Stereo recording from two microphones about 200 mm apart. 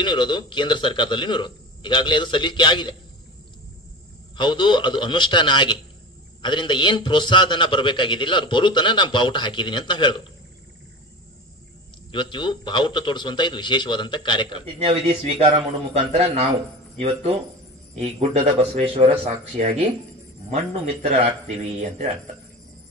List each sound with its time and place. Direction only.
0.0 s a man's voice: 25° left (ahead or behind)
4.4 s a man's voice: 25° left (ahead or behind)
12.1 s a man's voice: 25° left (ahead or behind)
14.9 s speech: 30° right (ahead or behind)